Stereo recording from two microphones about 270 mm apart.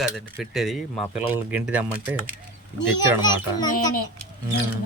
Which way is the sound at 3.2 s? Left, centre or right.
Centre.